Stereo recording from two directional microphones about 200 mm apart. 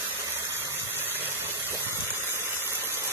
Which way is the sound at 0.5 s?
10° right (ahead or behind).